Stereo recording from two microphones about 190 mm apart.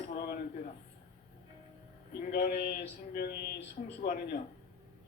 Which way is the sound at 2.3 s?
55° left (ahead or behind).